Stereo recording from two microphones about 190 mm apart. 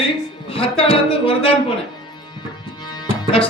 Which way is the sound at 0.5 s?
30° left (ahead or behind).